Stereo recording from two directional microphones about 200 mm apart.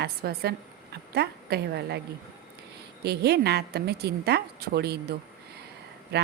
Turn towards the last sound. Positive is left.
turn(degrees=-55)  # may be behind; listen again after turning